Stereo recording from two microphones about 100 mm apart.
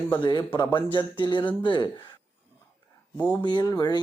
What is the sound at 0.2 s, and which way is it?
Speech, 55° left (ahead or behind).